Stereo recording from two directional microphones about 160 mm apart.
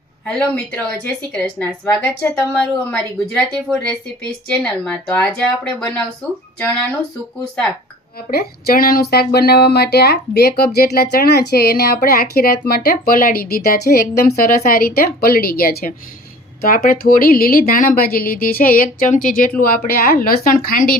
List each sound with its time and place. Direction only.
0.3 s a woman's voice: 5° left (ahead or behind)
8.3 s speech: 70° left (ahead or behind); by 10.5 s 85° left
10.6 s a woman's voice: 75° left (ahead or behind)